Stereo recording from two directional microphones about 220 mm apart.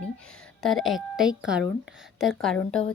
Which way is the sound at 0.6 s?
Centre (ahead or behind).